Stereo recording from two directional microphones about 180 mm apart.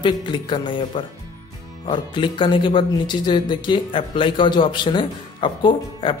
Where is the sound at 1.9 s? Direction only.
25° left (ahead or behind).